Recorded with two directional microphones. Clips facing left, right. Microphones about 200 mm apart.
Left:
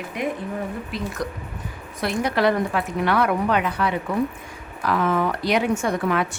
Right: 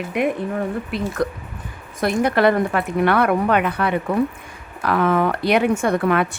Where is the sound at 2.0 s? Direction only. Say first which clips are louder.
Right 4 dB; 50° right (ahead or behind).